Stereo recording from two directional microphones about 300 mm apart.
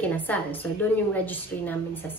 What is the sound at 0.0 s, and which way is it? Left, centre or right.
A woman's voice, centre.